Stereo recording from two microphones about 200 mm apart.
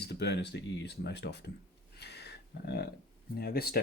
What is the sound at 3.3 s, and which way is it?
Speech, 50° left (ahead or behind).